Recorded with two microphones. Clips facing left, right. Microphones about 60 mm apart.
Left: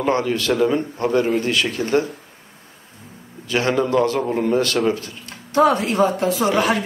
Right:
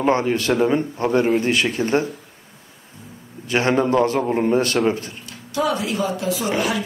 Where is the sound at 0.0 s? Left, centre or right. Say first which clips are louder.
Right 1 dB; right.